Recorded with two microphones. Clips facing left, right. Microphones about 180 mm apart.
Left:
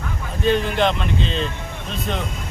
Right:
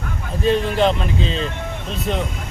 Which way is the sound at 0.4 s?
Centre (ahead or behind).